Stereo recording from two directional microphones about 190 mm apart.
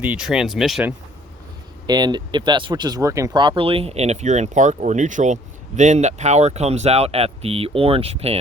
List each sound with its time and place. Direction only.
0.0 s speech: 5° right (ahead or behind)
1.9 s speech: 20° right (ahead or behind)